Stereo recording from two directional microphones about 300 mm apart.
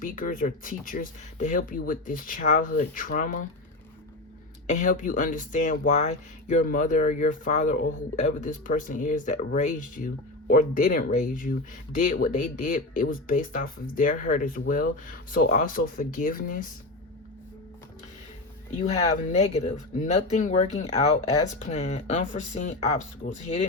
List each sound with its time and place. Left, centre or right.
0.0 s speech: left
4.7 s speech: left
18.8 s speech: left